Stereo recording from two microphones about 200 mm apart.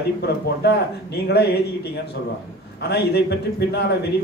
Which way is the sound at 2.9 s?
55° left (ahead or behind).